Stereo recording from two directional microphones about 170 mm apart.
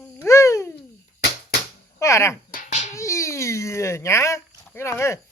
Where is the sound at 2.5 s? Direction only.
45° left (ahead or behind).